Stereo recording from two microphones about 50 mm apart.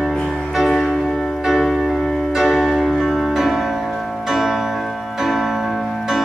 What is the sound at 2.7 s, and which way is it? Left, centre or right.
Music, centre.